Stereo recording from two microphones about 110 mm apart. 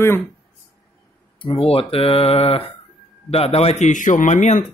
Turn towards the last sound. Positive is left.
turn(degrees=90)